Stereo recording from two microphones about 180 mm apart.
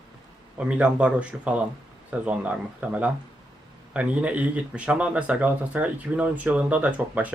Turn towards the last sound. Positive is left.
turn(degrees=-10)  # may be behind; listen again after turning